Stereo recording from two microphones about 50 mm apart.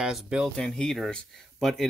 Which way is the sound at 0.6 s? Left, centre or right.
Centre.